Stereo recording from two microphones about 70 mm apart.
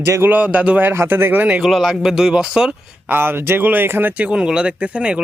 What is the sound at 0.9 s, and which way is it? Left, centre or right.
Speech, right.